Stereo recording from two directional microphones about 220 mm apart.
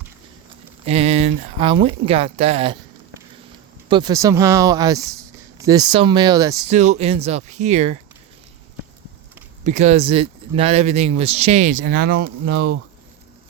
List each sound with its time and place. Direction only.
0.9 s speech: 30° right (ahead or behind)
3.8 s speech: 20° right (ahead or behind)
6.7 s speech: 30° right (ahead or behind)
9.6 s speech: 30° right (ahead or behind); by 12.7 s 50° right (ahead or behind)